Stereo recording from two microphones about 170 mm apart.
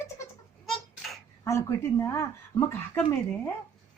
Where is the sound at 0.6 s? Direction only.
Centre (ahead or behind).